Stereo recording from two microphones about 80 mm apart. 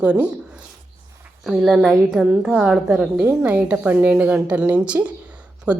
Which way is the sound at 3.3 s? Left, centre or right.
Centre.